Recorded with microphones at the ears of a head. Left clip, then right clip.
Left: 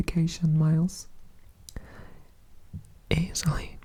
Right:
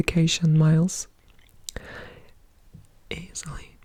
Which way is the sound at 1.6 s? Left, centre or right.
Right.